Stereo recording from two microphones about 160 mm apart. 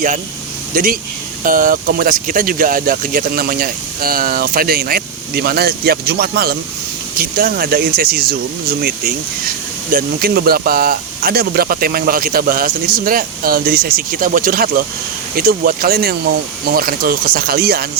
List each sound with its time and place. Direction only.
0.7 s speech: 60° right (ahead or behind)
9.9 s speech: 70° right (ahead or behind)